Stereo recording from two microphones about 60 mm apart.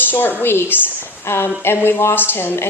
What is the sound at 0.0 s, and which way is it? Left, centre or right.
A woman's voice, left.